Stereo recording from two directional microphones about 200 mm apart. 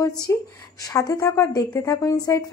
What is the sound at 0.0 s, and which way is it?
A woman's voice, 15° left (ahead or behind).